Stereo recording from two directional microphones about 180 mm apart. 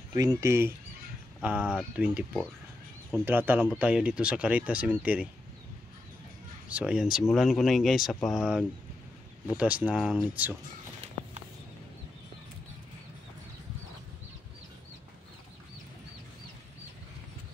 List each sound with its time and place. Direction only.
0.1 s speech: 20° right (ahead or behind)
3.3 s speech: 10° right (ahead or behind)
6.7 s speech: 5° right (ahead or behind)